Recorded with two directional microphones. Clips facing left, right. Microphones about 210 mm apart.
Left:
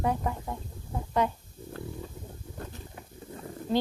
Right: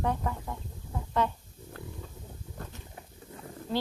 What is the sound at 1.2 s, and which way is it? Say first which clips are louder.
Speech: left 1 dB; 10° left (ahead or behind).